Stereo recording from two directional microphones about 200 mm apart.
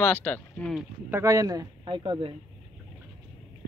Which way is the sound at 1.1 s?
15° right (ahead or behind).